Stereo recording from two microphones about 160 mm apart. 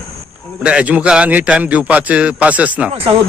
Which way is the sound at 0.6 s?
5° right (ahead or behind).